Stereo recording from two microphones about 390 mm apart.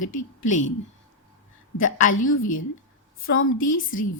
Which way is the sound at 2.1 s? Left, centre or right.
Left.